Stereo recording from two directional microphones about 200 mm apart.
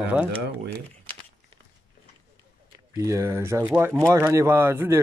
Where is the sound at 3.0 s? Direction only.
15° right (ahead or behind).